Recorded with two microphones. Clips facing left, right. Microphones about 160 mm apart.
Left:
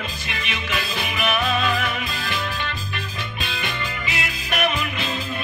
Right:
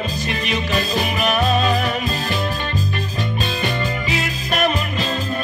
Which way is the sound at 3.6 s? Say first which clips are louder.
Right 7 dB; 40° right (ahead or behind).